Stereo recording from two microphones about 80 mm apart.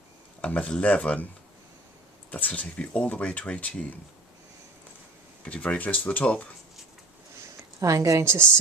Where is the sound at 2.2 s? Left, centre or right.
Centre.